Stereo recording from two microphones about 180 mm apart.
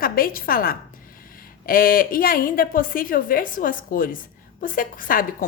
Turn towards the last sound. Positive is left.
turn(degrees=50)  # may be behind; listen again after turning